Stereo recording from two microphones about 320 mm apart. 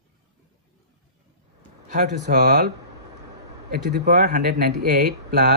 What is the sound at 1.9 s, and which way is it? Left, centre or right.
Speech, right.